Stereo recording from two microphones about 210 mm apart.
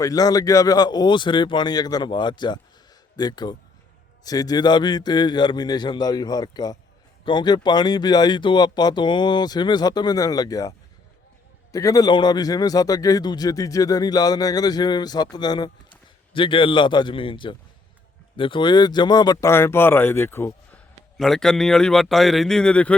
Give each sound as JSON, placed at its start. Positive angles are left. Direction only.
{"t": 0.0, "sound": "a man's voice", "side_deg": 15}